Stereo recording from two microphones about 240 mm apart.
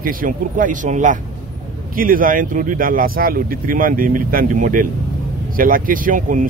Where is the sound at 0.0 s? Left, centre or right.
Right.